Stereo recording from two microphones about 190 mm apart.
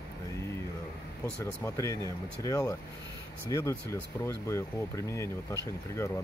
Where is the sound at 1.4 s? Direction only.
15° left (ahead or behind).